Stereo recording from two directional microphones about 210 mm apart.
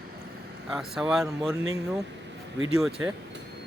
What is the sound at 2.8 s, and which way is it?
Speech, centre (ahead or behind).